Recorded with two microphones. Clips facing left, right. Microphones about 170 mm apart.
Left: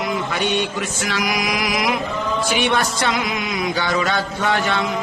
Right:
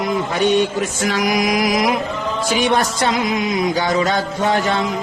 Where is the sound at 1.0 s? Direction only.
40° right (ahead or behind).